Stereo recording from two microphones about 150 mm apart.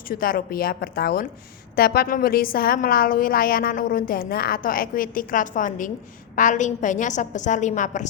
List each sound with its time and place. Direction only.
0.1 s a woman's voice: 75° left (ahead or behind); by 8.0 s 55° left (ahead or behind)